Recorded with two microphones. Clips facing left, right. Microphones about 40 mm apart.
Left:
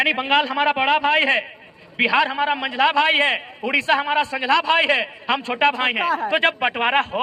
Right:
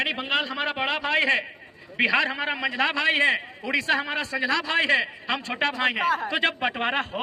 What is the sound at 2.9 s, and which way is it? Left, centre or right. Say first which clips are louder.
A man's voice: left 4 dB; left.